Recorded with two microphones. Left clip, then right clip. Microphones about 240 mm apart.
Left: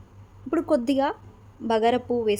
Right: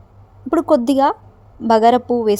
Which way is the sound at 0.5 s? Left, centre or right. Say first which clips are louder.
Right 8 dB; right.